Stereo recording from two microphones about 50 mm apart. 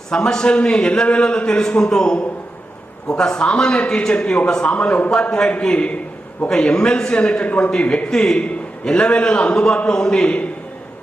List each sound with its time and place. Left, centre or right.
0.1 s a man's voice: centre